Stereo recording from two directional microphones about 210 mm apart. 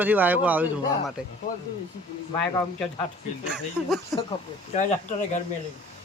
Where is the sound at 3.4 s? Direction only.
5° right (ahead or behind).